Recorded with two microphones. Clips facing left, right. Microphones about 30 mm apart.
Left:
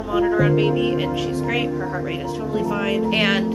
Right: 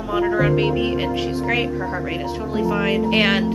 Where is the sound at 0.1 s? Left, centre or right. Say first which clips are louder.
Left 1 dB; centre.